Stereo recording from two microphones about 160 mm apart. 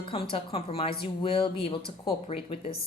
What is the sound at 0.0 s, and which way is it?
A woman's voice, 35° left (ahead or behind).